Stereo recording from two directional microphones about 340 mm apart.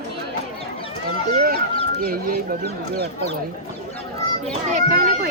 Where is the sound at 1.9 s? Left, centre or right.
Right.